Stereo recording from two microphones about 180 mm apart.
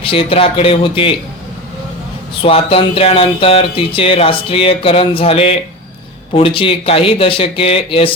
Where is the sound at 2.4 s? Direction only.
30° left (ahead or behind).